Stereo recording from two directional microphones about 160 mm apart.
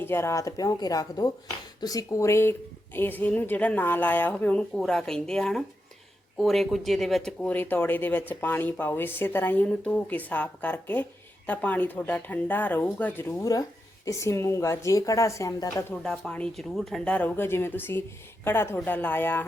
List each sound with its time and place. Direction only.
0.0 s a woman's voice: 15° left (ahead or behind)
13.4 s speech: 20° left (ahead or behind)
16.0 s a woman's voice: 5° left (ahead or behind)